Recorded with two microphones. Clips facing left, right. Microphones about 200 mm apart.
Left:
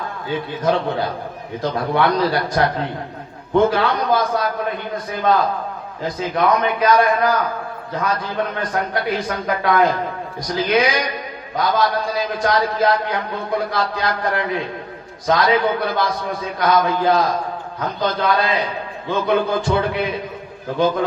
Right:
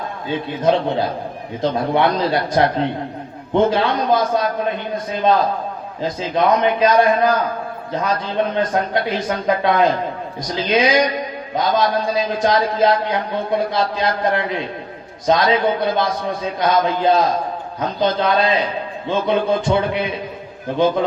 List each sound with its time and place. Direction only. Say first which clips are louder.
0.3 s a man's voice: right 3 dB; 25° right (ahead or behind)
6.0 s a man's voice: right 1 dB; 25° right (ahead or behind)
8.5 s a man's voice: right 4 dB; 25° right (ahead or behind)